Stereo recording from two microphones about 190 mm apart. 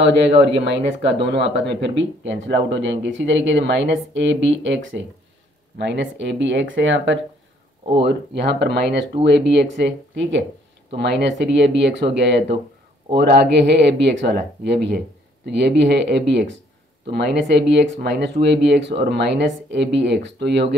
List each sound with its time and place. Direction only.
0.3 s speech: 60° right (ahead or behind)
8.0 s speech: 60° right (ahead or behind)